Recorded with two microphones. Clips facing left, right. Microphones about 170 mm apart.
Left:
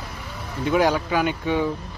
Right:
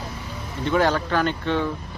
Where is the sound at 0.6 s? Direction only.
10° left (ahead or behind).